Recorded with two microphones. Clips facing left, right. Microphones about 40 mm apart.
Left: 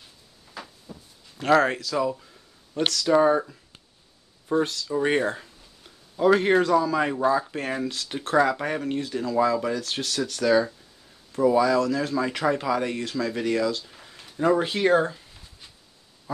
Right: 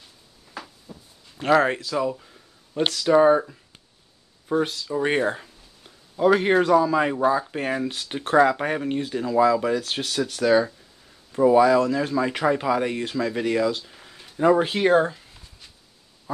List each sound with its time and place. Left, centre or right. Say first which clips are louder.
1.4 s speech: right 1 dB; centre
5.0 s a sound: right 1 dB; centre
6.6 s speech: right 3 dB; centre
11.3 s speech: right 4 dB; right
13.8 s a sound: right 1 dB; centre
14.4 s speech: right 3 dB; centre